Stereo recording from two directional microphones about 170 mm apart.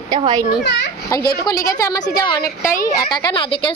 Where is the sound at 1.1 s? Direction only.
20° left (ahead or behind).